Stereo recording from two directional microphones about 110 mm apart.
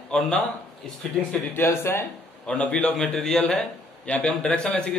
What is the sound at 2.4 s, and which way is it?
A man's voice, 10° left (ahead or behind).